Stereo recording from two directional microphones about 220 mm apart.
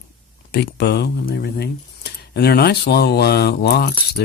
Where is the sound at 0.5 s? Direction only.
50° left (ahead or behind).